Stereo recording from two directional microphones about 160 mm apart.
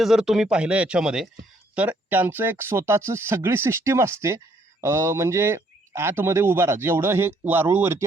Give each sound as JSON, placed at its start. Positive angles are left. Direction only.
{"t": 0.0, "sound": "a man's voice", "side_deg": -5}